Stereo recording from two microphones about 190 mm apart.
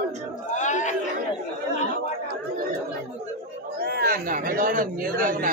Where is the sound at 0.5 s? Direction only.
40° left (ahead or behind).